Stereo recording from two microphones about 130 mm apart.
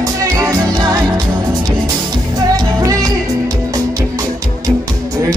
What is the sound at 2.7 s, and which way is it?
Music, 25° right (ahead or behind).